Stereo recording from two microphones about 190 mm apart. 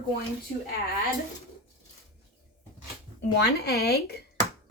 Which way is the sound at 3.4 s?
60° left (ahead or behind).